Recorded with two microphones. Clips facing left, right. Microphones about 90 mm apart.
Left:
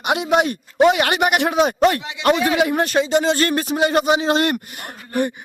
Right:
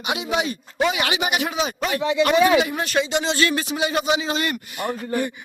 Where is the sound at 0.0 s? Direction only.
60° left (ahead or behind).